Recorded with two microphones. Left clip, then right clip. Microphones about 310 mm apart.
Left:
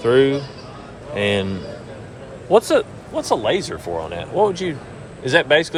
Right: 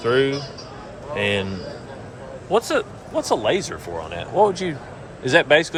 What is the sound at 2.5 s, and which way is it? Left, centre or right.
Speech, centre.